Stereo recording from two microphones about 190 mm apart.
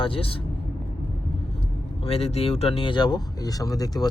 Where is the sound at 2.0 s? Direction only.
30° left (ahead or behind).